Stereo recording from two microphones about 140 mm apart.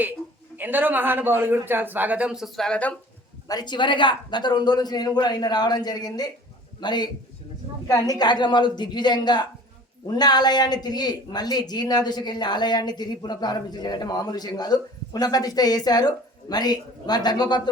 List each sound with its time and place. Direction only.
0.5 s a man's voice: 15° right (ahead or behind); by 2.9 s 5° left (ahead or behind)
3.4 s a man's voice: 30° left (ahead or behind)